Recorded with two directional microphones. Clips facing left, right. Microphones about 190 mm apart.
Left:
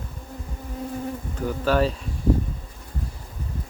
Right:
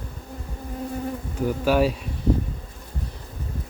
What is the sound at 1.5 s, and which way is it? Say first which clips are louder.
Speech: right 1 dB; 10° right (ahead or behind).